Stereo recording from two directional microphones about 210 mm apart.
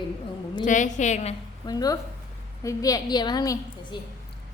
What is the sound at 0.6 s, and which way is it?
Speech, 35° left (ahead or behind).